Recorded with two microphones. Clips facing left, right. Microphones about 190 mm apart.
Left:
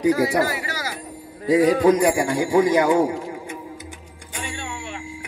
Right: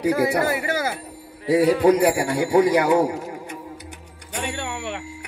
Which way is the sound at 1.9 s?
65° right (ahead or behind).